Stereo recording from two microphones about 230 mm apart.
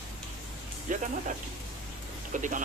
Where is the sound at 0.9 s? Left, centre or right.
Right.